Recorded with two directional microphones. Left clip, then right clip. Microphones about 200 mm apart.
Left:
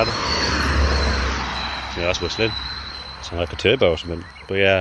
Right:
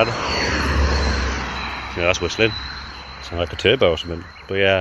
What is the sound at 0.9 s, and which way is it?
Vehicle, 40° right (ahead or behind).